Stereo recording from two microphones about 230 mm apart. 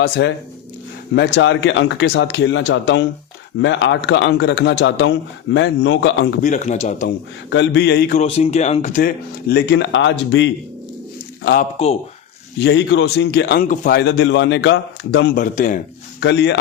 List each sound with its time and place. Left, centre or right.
0.0 s a man's voice: left
6.4 s speech: left
7.5 s a man's voice: left
8.2 s speech: left
11.8 s speech: left
12.6 s a man's voice: left
15.4 s speech: left
16.2 s a man's voice: left